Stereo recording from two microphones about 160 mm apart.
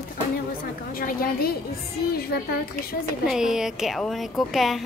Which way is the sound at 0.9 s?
65° left (ahead or behind).